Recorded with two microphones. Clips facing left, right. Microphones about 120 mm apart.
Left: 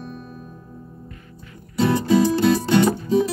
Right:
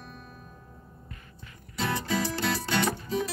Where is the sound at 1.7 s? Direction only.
20° left (ahead or behind).